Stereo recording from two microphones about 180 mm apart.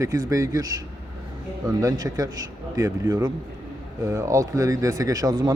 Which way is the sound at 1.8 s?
20° right (ahead or behind).